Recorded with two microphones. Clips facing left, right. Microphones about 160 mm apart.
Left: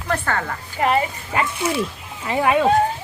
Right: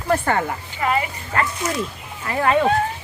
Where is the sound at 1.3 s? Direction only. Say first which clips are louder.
Left 1 dB; 15° left (ahead or behind).